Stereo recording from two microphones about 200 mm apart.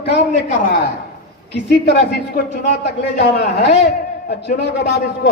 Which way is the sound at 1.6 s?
60° left (ahead or behind).